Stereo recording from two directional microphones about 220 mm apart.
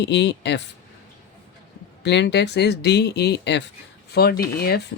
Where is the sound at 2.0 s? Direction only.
50° left (ahead or behind).